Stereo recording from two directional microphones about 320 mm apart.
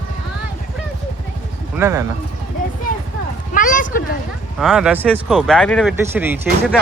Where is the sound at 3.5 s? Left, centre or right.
Left.